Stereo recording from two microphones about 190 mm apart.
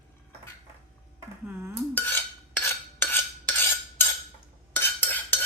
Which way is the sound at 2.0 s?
10° left (ahead or behind).